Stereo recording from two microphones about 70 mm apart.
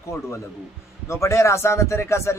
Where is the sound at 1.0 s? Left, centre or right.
Left.